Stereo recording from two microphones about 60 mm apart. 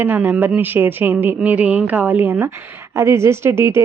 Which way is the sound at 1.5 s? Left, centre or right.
Right.